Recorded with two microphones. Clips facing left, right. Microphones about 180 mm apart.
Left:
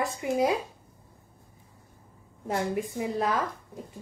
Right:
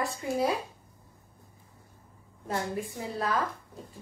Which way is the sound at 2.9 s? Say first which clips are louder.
Left 5 dB; 20° left (ahead or behind).